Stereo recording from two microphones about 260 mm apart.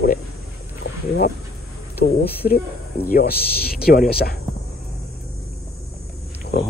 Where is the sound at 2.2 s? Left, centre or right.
Left.